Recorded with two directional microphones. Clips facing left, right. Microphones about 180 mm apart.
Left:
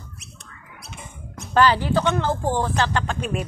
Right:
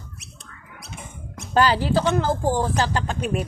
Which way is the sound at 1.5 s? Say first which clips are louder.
Left 1 dB; 35° right (ahead or behind).